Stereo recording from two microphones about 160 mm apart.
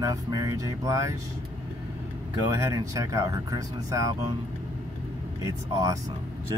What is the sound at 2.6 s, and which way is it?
Speech, 20° right (ahead or behind).